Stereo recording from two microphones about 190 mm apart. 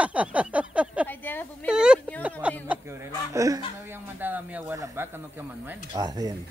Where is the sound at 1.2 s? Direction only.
10° left (ahead or behind).